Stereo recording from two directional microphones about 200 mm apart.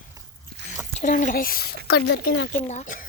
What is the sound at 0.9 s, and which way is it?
Speech, 40° left (ahead or behind).